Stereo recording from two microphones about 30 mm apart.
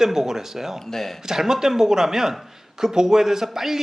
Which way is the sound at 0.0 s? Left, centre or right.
Centre.